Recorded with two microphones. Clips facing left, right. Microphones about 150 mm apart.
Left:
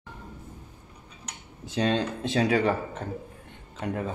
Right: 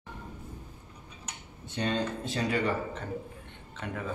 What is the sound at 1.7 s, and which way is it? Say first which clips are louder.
Speech: left 5 dB; 90° left.